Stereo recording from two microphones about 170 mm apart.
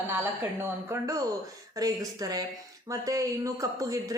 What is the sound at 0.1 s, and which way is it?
Speech, 15° right (ahead or behind).